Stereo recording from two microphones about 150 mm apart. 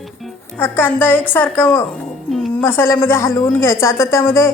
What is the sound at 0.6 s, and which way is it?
A woman's voice, 15° left (ahead or behind).